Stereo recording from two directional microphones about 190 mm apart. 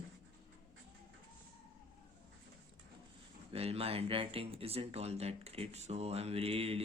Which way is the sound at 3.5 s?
30° right (ahead or behind).